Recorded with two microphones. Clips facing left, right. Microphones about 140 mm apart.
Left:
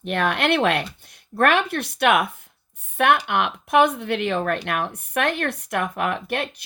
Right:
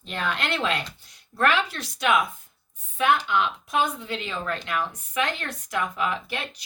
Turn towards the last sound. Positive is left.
turn(degrees=60)  # may be behind; listen again after turning